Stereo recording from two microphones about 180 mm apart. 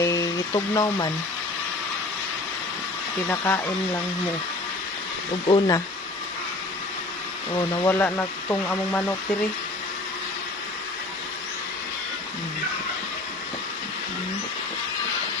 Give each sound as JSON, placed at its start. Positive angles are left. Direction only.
{"t": 0.0, "sound": "a sound", "side_deg": 20}
{"t": 3.2, "sound": "speech", "side_deg": 15}
{"t": 5.5, "sound": "speech", "side_deg": 25}
{"t": 7.5, "sound": "speech", "side_deg": 20}